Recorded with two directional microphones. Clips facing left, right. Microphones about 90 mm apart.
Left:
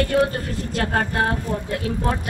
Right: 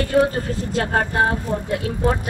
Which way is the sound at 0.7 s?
20° right (ahead or behind).